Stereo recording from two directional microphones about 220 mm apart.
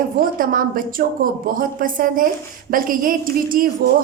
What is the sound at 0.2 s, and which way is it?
A woman's voice, 40° right (ahead or behind).